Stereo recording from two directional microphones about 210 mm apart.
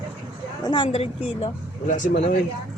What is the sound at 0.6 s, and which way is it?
Speech, 25° left (ahead or behind).